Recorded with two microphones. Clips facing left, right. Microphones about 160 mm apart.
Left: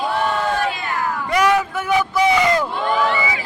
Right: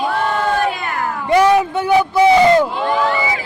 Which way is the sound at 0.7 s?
55° right (ahead or behind).